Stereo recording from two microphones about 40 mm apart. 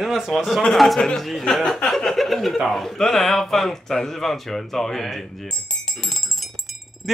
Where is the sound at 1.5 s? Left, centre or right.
Centre.